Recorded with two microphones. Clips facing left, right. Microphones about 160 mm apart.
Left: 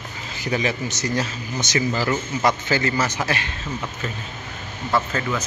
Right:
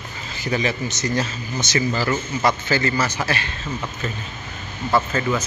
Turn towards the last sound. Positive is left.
turn(degrees=-5)  # may be behind; listen again after turning